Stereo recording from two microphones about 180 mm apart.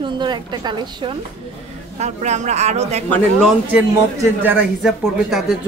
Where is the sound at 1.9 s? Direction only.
40° right (ahead or behind).